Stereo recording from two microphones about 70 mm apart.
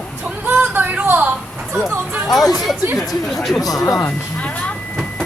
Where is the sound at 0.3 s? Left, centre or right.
Right.